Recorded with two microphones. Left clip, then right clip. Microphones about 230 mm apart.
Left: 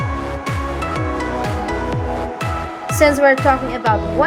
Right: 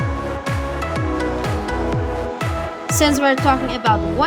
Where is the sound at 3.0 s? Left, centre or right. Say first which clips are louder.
Left 4 dB; right.